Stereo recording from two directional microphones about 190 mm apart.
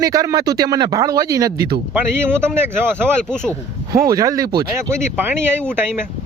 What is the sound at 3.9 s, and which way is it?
Speech, 20° right (ahead or behind).